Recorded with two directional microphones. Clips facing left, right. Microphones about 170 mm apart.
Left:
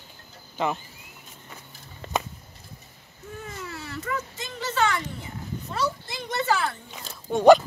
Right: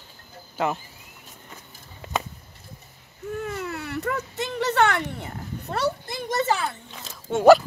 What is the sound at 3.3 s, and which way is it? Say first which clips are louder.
Baby cry: right 7 dB; 60° right (ahead or behind).